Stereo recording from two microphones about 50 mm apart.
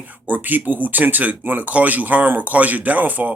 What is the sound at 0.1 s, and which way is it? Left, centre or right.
Speech, right.